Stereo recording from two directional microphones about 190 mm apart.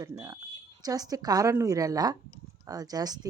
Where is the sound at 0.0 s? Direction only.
15° right (ahead or behind).